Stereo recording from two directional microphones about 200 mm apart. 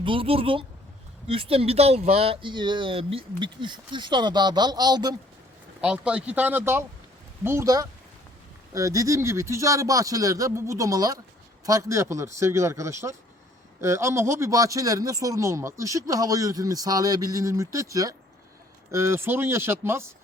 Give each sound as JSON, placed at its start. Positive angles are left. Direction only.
{"t": 0.0, "sound": "speech", "side_deg": -25}
{"t": 5.8, "sound": "speech", "side_deg": -5}